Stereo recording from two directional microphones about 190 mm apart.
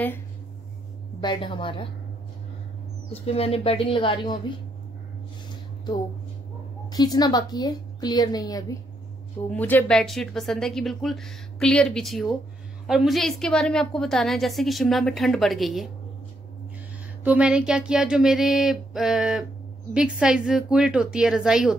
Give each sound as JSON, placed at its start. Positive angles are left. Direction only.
{"t": 1.2, "sound": "a woman's voice", "side_deg": 25}
{"t": 3.1, "sound": "a woman's voice", "side_deg": 30}
{"t": 6.9, "sound": "a woman's voice", "side_deg": 20}
{"t": 17.2, "sound": "a woman's voice", "side_deg": -5}